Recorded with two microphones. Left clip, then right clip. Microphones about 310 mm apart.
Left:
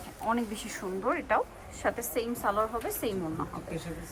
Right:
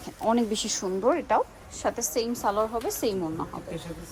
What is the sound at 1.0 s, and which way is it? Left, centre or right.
A woman's voice, centre.